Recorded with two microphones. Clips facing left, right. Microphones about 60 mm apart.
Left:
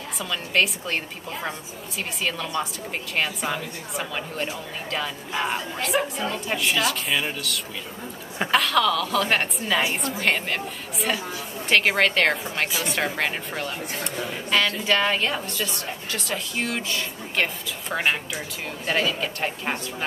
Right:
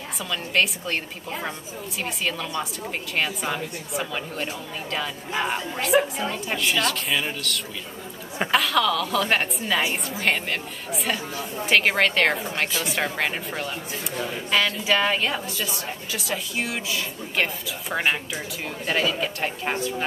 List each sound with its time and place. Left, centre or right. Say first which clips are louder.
0.2 s a woman's voice: even; centre